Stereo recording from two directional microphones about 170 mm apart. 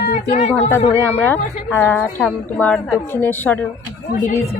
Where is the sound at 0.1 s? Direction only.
40° left (ahead or behind).